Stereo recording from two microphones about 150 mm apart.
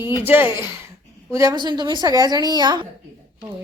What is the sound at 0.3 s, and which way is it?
A woman's voice, 15° right (ahead or behind).